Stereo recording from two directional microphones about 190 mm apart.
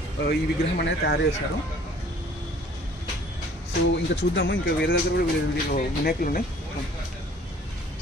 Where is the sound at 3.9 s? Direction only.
70° left (ahead or behind).